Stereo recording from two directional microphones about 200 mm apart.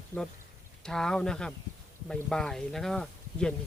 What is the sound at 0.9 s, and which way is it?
Speech, 5° left (ahead or behind).